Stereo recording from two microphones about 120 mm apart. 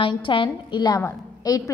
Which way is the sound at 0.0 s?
45° left (ahead or behind).